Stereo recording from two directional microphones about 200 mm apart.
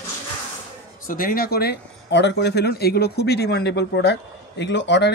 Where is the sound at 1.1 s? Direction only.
45° left (ahead or behind); by 5.1 s 60° left (ahead or behind).